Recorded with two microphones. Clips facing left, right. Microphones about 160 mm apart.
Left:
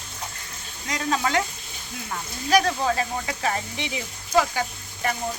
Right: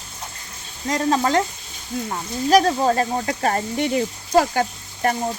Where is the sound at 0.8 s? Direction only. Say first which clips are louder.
Right 6 dB; 40° right (ahead or behind).